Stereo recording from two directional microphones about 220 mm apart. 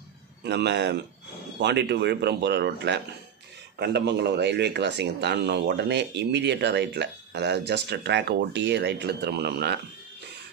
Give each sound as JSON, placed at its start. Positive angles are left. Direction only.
{"t": 0.4, "sound": "speech", "side_deg": -50}